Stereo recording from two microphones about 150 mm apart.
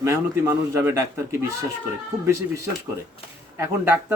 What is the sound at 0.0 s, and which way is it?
A man's voice, 20° right (ahead or behind).